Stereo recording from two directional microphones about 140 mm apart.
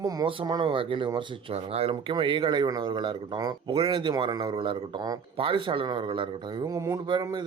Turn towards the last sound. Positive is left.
turn(degrees=-30)  # may be behind; listen again after turning